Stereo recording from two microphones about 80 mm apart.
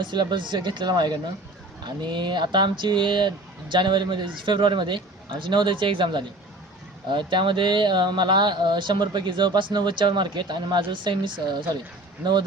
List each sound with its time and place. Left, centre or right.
0.0 s speech: right